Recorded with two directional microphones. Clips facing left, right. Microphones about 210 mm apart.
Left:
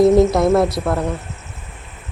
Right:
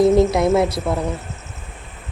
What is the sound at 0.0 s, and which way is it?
A woman's voice, centre (ahead or behind).